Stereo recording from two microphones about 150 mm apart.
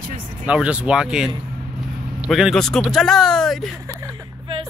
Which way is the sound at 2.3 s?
Centre (ahead or behind).